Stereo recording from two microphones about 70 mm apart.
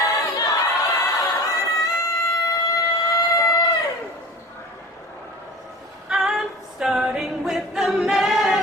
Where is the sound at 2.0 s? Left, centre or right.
Left.